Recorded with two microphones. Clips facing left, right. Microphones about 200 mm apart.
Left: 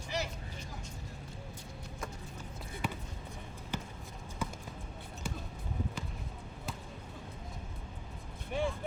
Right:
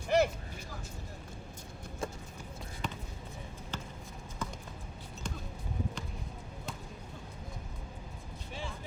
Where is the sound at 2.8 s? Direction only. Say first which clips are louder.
Left 2 dB; 10° left (ahead or behind).